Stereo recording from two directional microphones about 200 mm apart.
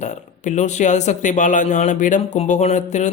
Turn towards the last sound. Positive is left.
turn(degrees=35)  # may be behind; listen again after turning